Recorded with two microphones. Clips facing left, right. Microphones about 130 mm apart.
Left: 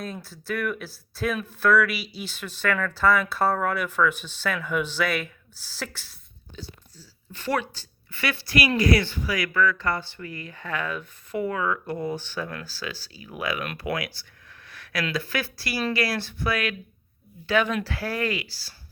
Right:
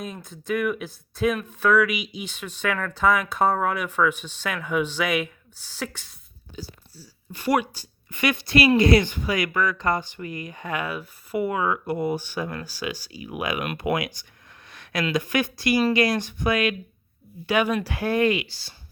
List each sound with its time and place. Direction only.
0.0 s speech: 15° right (ahead or behind)
0.9 s speech: 5° left (ahead or behind)
1.5 s speech: 10° right (ahead or behind)
6.6 s speech: 5° right (ahead or behind)
14.7 s a sound: 20° right (ahead or behind)
15.1 s speech: 20° right (ahead or behind)